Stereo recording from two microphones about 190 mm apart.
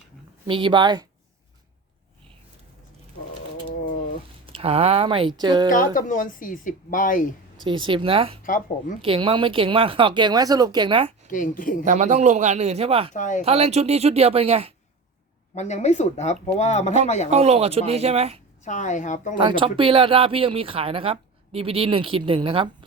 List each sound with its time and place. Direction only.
0.4 s speech: 25° right (ahead or behind)
4.4 s speech: 30° right (ahead or behind)
5.8 s speech: 45° left (ahead or behind)
7.6 s speech: 25° right (ahead or behind)
8.4 s speech: 45° left (ahead or behind)
9.0 s speech: 30° right (ahead or behind)
11.3 s speech: 45° left (ahead or behind)
11.9 s a man's voice: 40° right (ahead or behind)
13.1 s speech: 40° left (ahead or behind)
13.4 s a man's voice: 35° right (ahead or behind)
15.5 s speech: 35° left (ahead or behind)
17.3 s a man's voice: 35° right (ahead or behind)
18.6 s speech: 40° left (ahead or behind)
19.4 s speech: 25° right (ahead or behind)